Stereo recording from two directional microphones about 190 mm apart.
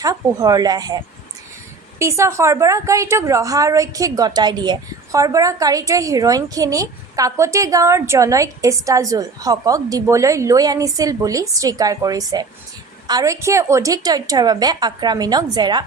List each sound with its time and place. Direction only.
0.0 s a woman's voice: 20° right (ahead or behind)
2.0 s a woman's voice: 15° right (ahead or behind)